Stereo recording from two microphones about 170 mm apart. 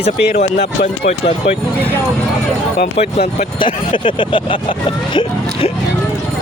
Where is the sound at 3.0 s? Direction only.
35° left (ahead or behind).